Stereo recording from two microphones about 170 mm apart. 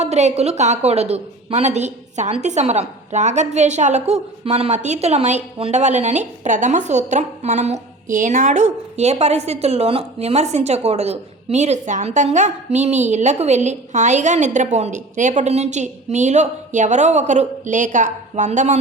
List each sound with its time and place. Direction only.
0.0 s a woman's voice: 40° right (ahead or behind)